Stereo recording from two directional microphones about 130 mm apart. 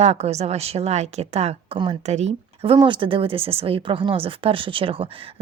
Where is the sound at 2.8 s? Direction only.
40° right (ahead or behind).